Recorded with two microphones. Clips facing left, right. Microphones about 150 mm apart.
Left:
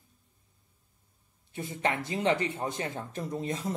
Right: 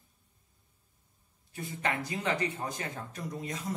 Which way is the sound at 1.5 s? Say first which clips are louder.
Left 3 dB; 25° left (ahead or behind).